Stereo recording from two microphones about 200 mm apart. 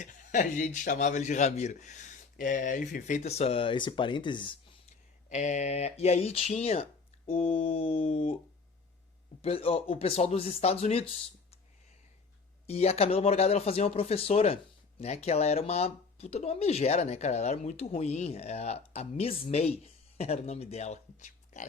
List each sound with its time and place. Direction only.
0.0 s speech: 40° left (ahead or behind)
5.3 s speech: 35° left (ahead or behind)
9.4 s speech: 30° left (ahead or behind)
12.6 s speech: 30° left (ahead or behind)